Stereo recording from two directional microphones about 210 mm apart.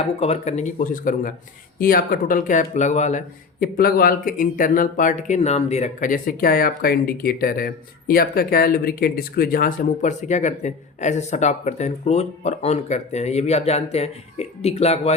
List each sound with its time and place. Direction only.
0.0 s speech: 30° left (ahead or behind)